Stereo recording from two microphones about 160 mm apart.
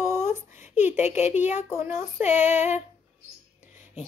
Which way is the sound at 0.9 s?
45° left (ahead or behind).